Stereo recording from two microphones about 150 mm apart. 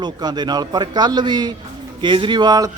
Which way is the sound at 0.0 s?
30° right (ahead or behind).